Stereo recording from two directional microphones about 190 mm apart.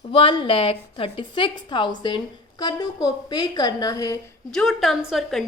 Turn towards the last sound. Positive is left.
turn(degrees=0)  # may be behind; listen again after turning